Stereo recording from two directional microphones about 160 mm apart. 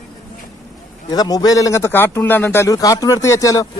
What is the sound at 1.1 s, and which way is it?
Speech, 25° left (ahead or behind).